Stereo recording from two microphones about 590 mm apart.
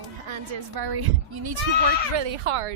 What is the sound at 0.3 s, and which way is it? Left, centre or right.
A child's voice, right.